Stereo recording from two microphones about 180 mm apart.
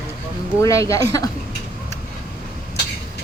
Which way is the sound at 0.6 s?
15° left (ahead or behind).